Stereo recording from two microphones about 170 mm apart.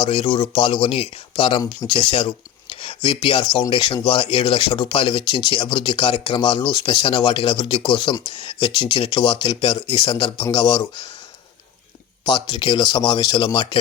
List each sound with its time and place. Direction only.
0.0 s speech: 30° left (ahead or behind)
12.3 s speech: 30° left (ahead or behind)